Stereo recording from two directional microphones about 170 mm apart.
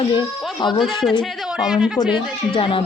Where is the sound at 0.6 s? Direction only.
25° left (ahead or behind).